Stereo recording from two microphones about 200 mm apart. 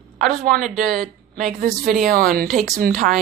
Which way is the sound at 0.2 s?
40° right (ahead or behind).